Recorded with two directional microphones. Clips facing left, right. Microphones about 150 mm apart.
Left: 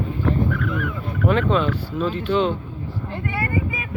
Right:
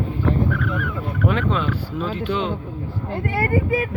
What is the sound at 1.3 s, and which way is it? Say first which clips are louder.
Speech: left 6 dB; 10° right (ahead or behind).